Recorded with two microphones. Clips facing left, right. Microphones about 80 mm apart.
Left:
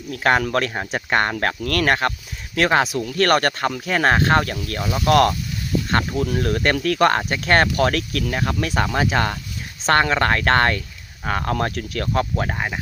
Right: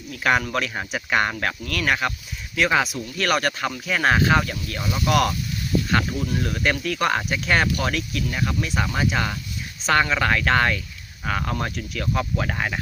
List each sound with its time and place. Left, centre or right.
0.1 s speech: left
0.7 s speech: left
0.9 s speech: left
7.3 s speech: left
11.3 s speech: left
11.5 s speech: left
12.5 s speech: centre